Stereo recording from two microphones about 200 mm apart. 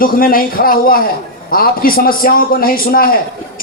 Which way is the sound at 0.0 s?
45° left (ahead or behind).